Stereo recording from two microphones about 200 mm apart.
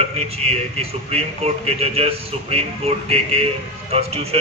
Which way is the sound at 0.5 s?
30° right (ahead or behind).